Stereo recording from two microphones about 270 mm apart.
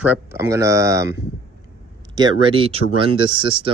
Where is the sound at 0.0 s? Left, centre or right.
Centre.